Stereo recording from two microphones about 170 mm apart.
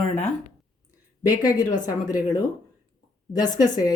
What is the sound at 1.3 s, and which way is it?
Speech, 20° left (ahead or behind).